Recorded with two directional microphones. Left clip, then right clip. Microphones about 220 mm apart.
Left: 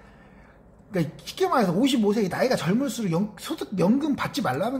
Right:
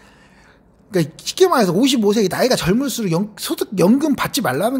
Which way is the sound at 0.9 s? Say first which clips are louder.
Right 10 dB; 45° right (ahead or behind).